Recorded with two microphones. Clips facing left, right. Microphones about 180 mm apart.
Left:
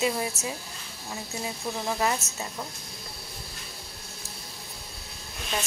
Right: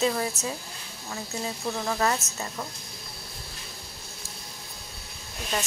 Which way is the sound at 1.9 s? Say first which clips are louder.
Right 1 dB; 10° left (ahead or behind).